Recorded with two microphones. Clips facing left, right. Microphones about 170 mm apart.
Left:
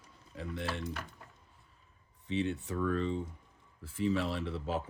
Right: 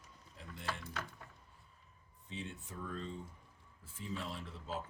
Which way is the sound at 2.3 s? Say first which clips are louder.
Left 13 dB; 75° left (ahead or behind).